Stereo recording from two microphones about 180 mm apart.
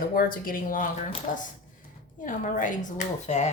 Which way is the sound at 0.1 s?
50° left (ahead or behind).